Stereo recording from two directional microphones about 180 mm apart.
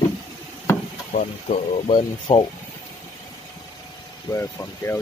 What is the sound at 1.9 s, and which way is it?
Speech, 30° left (ahead or behind).